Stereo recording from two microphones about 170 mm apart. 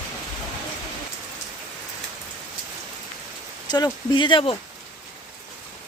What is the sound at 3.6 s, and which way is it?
Speech, 25° left (ahead or behind).